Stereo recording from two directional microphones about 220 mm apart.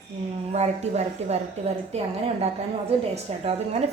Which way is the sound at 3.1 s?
30° right (ahead or behind).